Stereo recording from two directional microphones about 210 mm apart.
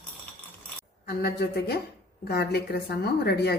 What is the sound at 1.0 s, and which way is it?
A woman's voice, 50° left (ahead or behind).